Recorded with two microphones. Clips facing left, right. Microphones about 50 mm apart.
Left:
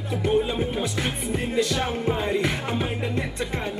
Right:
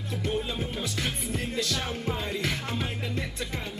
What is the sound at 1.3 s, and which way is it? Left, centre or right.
Music, centre.